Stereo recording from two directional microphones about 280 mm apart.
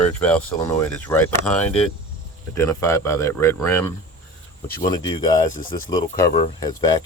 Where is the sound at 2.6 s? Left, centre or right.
Centre.